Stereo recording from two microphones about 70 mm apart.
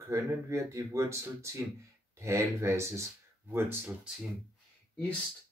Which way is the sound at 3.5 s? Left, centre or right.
Right.